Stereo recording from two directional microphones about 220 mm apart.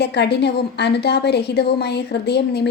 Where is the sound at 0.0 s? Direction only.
50° left (ahead or behind).